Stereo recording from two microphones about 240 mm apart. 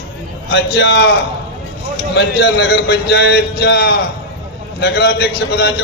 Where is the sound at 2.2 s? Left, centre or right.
Left.